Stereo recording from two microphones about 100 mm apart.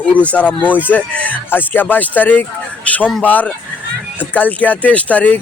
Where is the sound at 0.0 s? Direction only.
15° left (ahead or behind).